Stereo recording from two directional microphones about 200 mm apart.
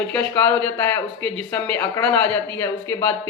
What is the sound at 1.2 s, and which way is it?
A man's voice, 10° left (ahead or behind).